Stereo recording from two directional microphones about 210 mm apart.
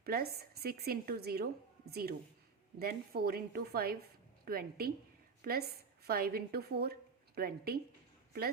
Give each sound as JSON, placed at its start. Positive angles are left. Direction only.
{"t": 0.0, "sound": "a woman's voice", "side_deg": -45}